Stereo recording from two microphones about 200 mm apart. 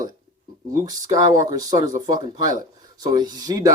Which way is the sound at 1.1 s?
20° right (ahead or behind).